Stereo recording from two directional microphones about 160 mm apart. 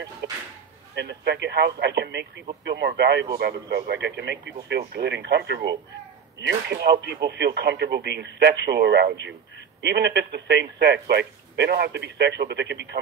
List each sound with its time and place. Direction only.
0.2 s speech: 90° right